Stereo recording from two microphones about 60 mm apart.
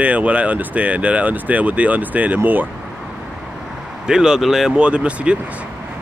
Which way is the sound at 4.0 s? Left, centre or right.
Centre.